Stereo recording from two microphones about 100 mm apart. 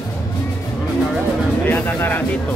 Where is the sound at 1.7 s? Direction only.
20° left (ahead or behind).